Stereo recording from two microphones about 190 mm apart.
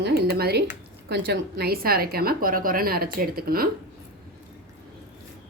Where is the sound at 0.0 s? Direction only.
55° right (ahead or behind).